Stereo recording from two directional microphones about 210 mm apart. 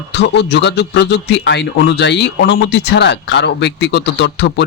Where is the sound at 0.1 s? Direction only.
55° left (ahead or behind).